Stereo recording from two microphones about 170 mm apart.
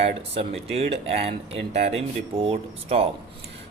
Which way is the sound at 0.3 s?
35° right (ahead or behind).